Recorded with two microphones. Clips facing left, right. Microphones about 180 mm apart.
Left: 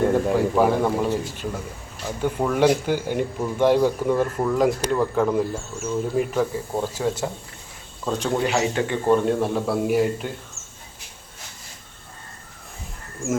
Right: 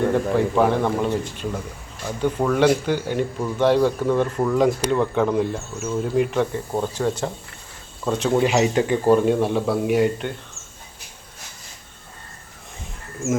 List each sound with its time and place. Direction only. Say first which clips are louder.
0.1 s speech: even; 10° left (ahead or behind)
8.4 s speech: right 4 dB; 15° right (ahead or behind)
9.0 s speech: right 1 dB; 5° right (ahead or behind)